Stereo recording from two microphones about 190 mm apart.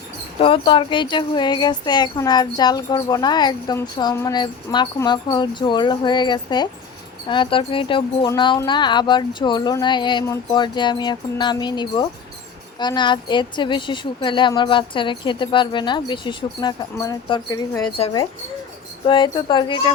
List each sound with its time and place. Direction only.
0.3 s speech: 30° left (ahead or behind)
17.9 s speech: 30° left (ahead or behind)